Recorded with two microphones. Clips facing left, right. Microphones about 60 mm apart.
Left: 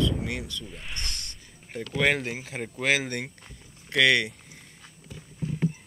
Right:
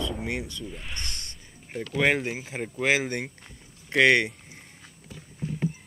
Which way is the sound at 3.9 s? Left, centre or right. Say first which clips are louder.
Right 2 dB; right.